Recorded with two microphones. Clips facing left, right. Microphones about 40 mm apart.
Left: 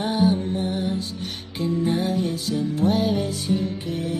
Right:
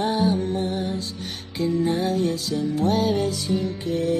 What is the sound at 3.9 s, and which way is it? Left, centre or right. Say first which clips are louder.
Music: right 9 dB; centre.